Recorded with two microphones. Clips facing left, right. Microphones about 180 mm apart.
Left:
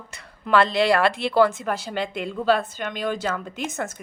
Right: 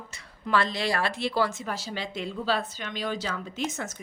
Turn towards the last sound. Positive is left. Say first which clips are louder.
# left 3 dB
turn(degrees=55)  # may be behind; listen again after turning